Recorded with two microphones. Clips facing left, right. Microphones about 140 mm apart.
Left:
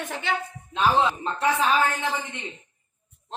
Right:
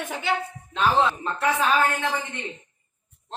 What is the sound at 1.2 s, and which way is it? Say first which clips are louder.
Speech: even; 20° left (ahead or behind).